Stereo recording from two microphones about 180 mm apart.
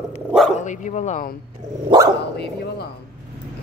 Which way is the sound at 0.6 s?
45° left (ahead or behind).